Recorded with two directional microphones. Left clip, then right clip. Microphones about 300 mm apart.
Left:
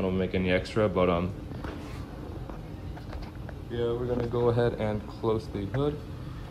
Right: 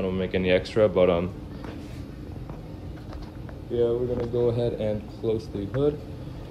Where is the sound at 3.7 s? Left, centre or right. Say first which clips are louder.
Right 6 dB; centre.